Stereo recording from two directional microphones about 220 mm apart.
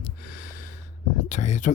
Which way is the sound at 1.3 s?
35° left (ahead or behind).